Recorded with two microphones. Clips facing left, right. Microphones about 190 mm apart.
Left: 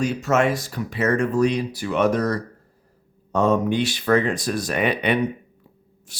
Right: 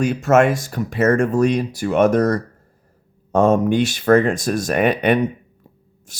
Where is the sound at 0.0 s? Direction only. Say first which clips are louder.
Right 5 dB; 50° right (ahead or behind).